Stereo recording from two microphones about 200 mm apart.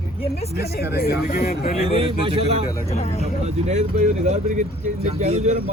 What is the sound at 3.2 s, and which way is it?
A man's voice, 35° right (ahead or behind).